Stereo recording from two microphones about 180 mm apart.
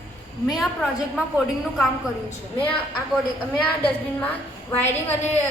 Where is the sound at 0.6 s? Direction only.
Centre (ahead or behind).